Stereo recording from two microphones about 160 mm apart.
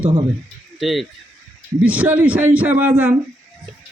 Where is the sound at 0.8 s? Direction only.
Centre (ahead or behind).